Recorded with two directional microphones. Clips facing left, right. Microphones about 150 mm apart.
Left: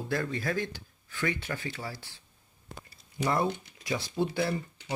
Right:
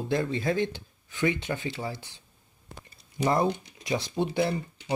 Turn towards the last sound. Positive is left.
turn(degrees=-20)  # may be behind; listen again after turning